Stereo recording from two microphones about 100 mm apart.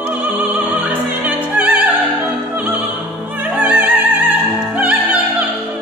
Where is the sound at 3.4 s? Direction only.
15° right (ahead or behind).